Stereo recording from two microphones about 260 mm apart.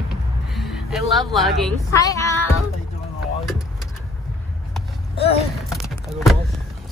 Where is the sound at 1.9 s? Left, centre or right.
Centre.